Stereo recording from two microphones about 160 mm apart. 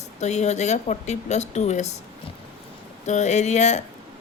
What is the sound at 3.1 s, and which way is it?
Speech, 50° left (ahead or behind).